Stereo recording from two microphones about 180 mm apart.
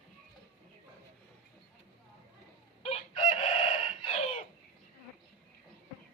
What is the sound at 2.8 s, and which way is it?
Chicken, 30° left (ahead or behind).